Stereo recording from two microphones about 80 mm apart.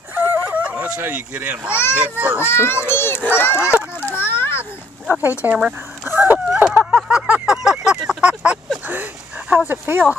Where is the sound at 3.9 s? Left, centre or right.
Left.